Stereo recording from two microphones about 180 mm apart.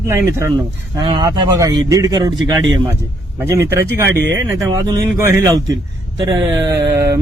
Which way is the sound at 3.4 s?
15° right (ahead or behind).